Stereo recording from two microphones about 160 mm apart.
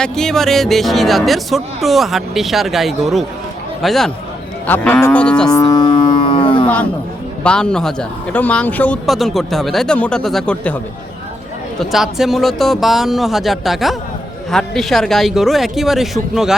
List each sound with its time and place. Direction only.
0.0 s speech: 5° left (ahead or behind)
4.6 s speech: 10° left (ahead or behind)
5.5 s cattle: 25° left (ahead or behind)
7.4 s speech: 5° left (ahead or behind)
9.0 s speech: centre (ahead or behind)
11.8 s speech: centre (ahead or behind)